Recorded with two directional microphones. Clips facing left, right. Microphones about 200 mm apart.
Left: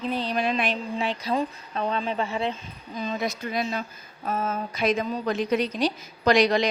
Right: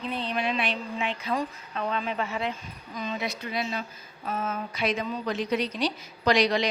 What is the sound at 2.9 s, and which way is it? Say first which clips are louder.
Speech: left 3 dB; 40° left (ahead or behind).